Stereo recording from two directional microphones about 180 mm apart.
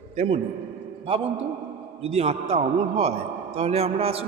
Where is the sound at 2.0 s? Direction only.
35° right (ahead or behind).